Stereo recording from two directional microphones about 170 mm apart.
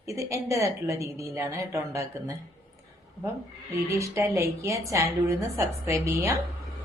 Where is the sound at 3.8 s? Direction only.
15° right (ahead or behind).